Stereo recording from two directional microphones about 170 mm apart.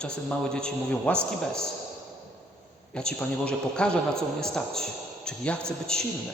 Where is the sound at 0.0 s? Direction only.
5° left (ahead or behind).